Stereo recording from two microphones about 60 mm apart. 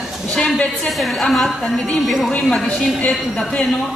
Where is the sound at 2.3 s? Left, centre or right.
Centre.